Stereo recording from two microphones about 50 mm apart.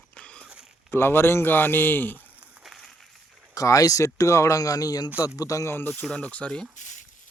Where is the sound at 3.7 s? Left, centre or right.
Left.